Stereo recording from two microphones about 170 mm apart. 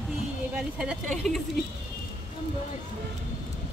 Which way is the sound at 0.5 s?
5° right (ahead or behind).